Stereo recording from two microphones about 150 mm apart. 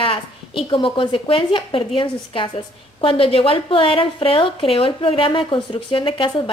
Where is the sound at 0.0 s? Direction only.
35° left (ahead or behind).